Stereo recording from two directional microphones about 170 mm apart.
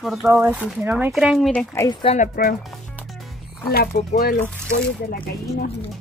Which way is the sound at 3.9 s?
45° left (ahead or behind).